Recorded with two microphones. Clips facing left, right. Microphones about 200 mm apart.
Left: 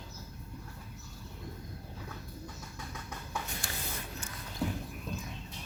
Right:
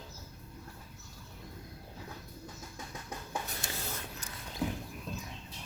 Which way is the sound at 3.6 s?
20° right (ahead or behind).